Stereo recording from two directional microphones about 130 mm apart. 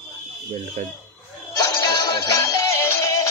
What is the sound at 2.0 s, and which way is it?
Music, 20° left (ahead or behind).